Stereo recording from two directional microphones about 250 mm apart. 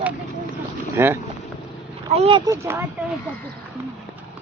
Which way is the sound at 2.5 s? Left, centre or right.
Centre.